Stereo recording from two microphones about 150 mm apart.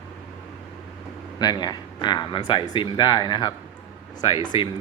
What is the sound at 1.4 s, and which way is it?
A man's voice, 25° left (ahead or behind).